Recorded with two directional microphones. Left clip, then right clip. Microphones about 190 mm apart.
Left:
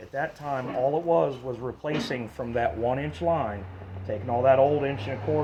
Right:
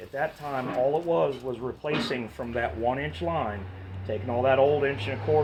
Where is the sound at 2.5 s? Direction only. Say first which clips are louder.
Left 2 dB; 50° left (ahead or behind).